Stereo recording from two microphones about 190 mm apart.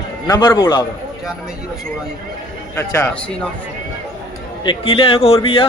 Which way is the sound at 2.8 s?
15° left (ahead or behind).